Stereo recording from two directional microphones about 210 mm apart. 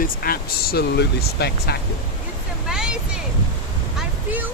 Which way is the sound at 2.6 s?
5° right (ahead or behind).